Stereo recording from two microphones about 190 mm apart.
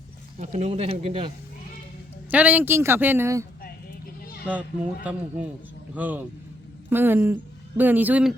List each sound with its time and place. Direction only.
0.3 s speech: 40° right (ahead or behind)
2.3 s speech: 10° right (ahead or behind)
4.4 s speech: 10° right (ahead or behind)
5.9 s speech: 10° right (ahead or behind)